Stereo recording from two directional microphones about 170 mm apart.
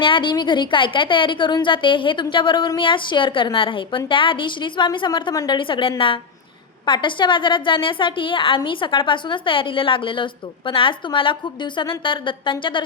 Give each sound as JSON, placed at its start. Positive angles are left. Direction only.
{"t": 0.0, "sound": "a woman's voice", "side_deg": 30}